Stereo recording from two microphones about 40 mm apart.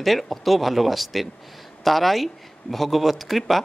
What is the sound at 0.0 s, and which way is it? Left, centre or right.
Speech, centre.